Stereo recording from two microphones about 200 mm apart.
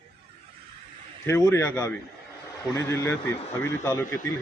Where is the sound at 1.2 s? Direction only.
15° left (ahead or behind).